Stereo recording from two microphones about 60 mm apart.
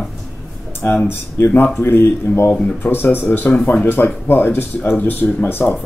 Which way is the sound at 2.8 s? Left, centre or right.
Left.